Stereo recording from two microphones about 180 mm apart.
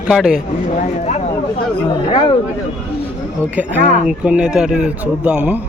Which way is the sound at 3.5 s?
10° right (ahead or behind).